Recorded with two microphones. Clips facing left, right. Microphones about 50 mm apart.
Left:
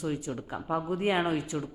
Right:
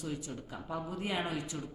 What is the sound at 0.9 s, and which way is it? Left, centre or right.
Speech, left.